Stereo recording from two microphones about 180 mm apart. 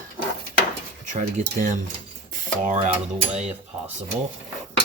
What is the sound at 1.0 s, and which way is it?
Speech, 45° right (ahead or behind).